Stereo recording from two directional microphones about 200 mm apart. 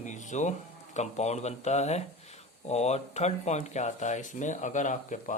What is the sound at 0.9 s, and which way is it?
Speech, 35° left (ahead or behind).